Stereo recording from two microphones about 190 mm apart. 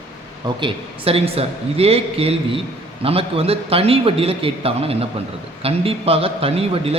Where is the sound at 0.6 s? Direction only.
30° right (ahead or behind).